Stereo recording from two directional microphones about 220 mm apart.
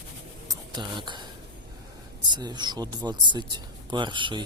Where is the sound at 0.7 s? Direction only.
20° right (ahead or behind).